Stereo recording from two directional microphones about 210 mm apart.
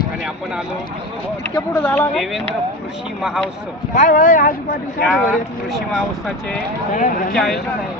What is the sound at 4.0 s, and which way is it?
Speech, 40° left (ahead or behind).